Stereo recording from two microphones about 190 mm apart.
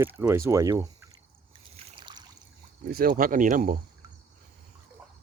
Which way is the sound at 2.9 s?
45° right (ahead or behind).